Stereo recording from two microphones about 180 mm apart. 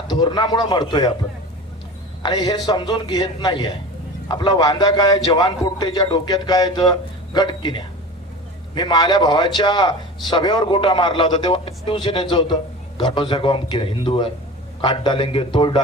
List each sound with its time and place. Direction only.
0.1 s a man's voice: 25° left (ahead or behind)
2.2 s a man's voice: 20° left (ahead or behind)